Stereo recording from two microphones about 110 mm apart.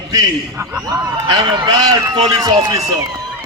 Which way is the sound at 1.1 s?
40° right (ahead or behind).